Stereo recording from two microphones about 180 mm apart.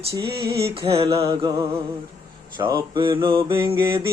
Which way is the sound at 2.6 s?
25° right (ahead or behind).